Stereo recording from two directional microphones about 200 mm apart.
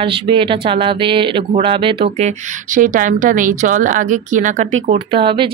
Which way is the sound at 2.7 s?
40° right (ahead or behind).